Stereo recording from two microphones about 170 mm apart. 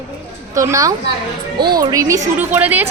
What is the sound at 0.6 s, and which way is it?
A woman's voice, 20° right (ahead or behind).